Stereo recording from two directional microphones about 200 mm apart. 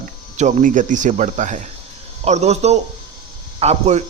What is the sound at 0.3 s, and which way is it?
A man's voice, 35° right (ahead or behind).